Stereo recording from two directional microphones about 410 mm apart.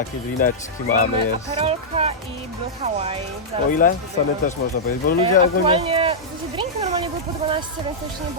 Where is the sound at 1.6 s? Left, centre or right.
Centre.